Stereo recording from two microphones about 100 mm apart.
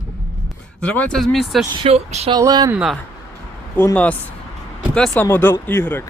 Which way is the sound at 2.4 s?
40° right (ahead or behind).